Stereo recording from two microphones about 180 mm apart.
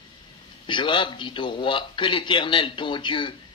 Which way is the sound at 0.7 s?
25° left (ahead or behind).